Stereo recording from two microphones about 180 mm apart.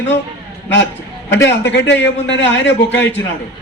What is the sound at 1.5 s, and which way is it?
Speech, 75° left (ahead or behind).